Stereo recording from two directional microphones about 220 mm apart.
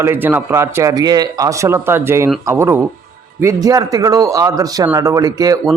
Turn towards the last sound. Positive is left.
turn(degrees=-15)  # may be behind; listen again after turning